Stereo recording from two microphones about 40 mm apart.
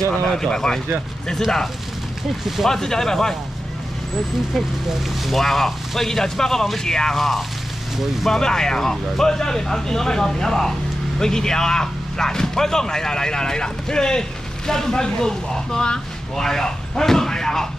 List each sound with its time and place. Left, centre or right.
0.1 s speech: left
2.4 s speech: centre
2.7 s speech: centre
5.2 s speech: centre
7.2 s speech: centre